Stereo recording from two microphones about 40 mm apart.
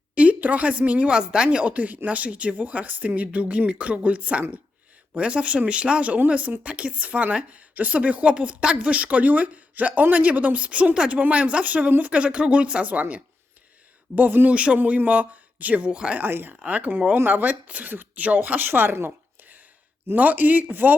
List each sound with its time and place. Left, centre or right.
0.1 s a sound: right
0.3 s speech: right
1.1 s speech: centre
1.5 s a woman's voice: right
6.1 s a woman's voice: right
11.9 s speech: right
12.1 s a woman's voice: right
14.2 s speech: right
14.5 s a woman's voice: right
14.8 s a woman's voice: right
16.1 s speech: right
16.6 s a woman's voice: right
18.7 s speech: right
20.1 s speech: right